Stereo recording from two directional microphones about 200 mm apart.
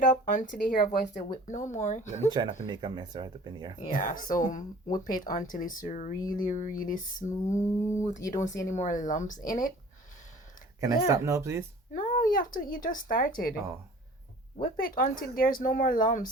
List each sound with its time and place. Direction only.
0.0 s speech: 40° left (ahead or behind)
2.3 s speech: 20° right (ahead or behind)
3.8 s speech: 40° left (ahead or behind)
7.5 s speech: 15° left (ahead or behind)
8.0 s speech: 40° left (ahead or behind)
10.8 s speech: 15° right (ahead or behind)
11.9 s speech: 40° left (ahead or behind)
14.6 s speech: 45° left (ahead or behind)